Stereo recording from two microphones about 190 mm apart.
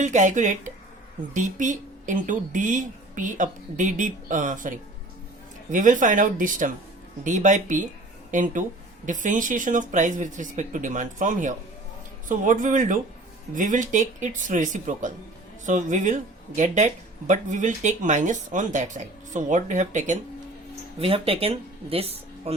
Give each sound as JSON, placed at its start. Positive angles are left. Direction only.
{"t": 0.0, "sound": "speech", "side_deg": -40}